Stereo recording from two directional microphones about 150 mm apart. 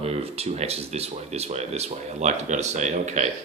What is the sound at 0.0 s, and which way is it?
Speech, 45° right (ahead or behind).